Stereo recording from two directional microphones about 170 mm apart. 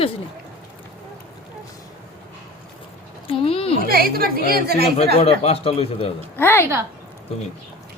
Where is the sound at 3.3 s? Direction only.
35° left (ahead or behind).